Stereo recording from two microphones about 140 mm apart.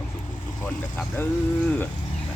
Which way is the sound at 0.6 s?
10° left (ahead or behind).